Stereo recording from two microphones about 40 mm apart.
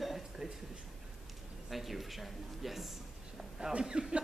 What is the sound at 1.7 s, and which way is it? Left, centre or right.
Speech, centre.